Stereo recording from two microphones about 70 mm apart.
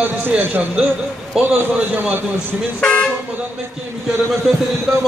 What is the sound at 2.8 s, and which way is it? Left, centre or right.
Speech, centre.